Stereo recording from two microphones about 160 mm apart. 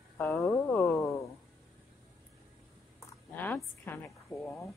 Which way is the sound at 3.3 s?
10° left (ahead or behind).